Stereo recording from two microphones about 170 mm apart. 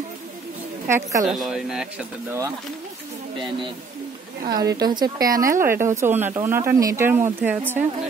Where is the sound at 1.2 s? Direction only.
Centre (ahead or behind).